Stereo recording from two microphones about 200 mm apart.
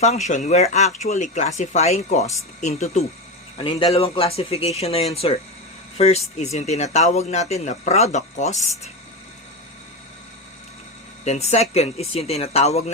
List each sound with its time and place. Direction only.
0.0 s speech: 35° left (ahead or behind)
11.3 s speech: 35° left (ahead or behind)